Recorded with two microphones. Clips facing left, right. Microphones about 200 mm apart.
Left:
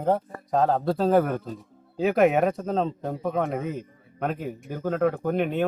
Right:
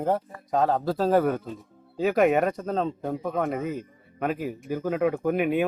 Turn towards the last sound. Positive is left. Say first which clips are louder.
# right 2 dB
turn(degrees=-5)  # may be behind; listen again after turning